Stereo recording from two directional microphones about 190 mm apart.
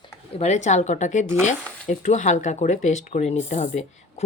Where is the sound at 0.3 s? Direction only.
35° left (ahead or behind).